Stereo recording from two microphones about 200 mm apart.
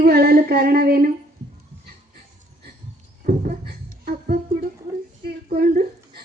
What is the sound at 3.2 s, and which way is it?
Music, 40° right (ahead or behind).